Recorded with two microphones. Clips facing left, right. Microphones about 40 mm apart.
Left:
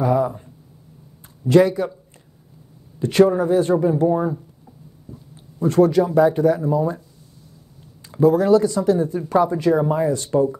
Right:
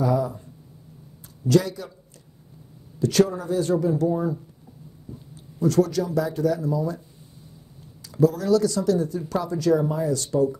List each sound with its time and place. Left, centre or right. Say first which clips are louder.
0.0 s speech: left 4 dB; left
1.5 s speech: left 7 dB; left
3.0 s speech: left 6 dB; left
8.0 s speech: left 5 dB; left